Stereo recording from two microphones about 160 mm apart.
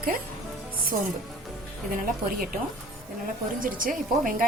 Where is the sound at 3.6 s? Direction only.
60° right (ahead or behind).